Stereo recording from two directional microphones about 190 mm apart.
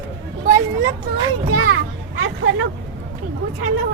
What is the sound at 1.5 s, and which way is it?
Children playing, 90° right.